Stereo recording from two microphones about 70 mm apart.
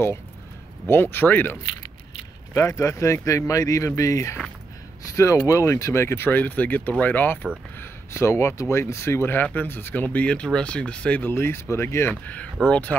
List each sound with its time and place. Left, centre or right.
0.8 s speech: left
2.5 s speech: left
7.7 s speech: left; by 11.3 s centre
11.3 s speech: left
12.1 s speech: left